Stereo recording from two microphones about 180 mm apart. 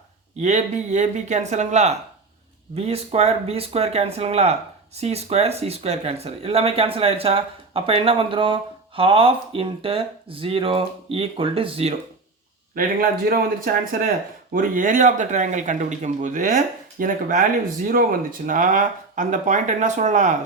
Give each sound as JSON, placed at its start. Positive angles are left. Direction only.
{"t": 0.3, "sound": "speech", "side_deg": -40}
{"t": 12.7, "sound": "speech", "side_deg": -50}